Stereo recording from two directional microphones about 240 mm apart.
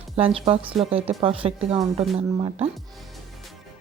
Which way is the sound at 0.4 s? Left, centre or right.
Right.